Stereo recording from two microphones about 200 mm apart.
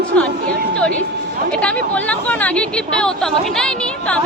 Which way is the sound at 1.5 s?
5° left (ahead or behind).